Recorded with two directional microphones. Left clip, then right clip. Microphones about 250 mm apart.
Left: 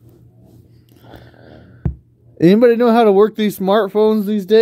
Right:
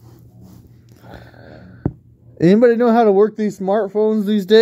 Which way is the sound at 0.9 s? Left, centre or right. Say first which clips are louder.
Right 1 dB; centre.